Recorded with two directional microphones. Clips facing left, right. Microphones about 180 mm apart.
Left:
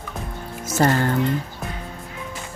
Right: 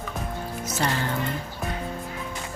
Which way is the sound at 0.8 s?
50° left (ahead or behind).